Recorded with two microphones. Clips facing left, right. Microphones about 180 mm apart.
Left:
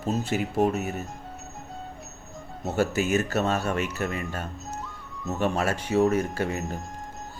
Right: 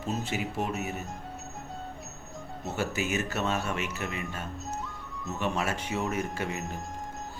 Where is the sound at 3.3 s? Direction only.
40° left (ahead or behind).